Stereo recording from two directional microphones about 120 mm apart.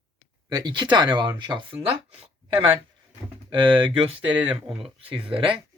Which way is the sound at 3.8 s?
50° right (ahead or behind).